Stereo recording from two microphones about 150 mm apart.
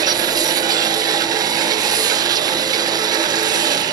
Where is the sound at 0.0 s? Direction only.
25° right (ahead or behind).